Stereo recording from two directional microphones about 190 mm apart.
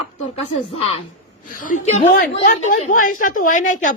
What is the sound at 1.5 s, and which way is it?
A woman's voice, 45° left (ahead or behind).